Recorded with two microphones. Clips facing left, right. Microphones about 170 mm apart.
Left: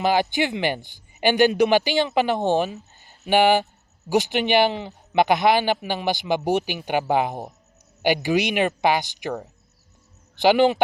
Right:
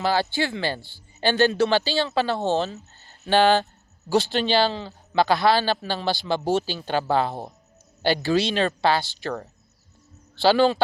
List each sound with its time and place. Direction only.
0.0 s a man's voice: 15° left (ahead or behind)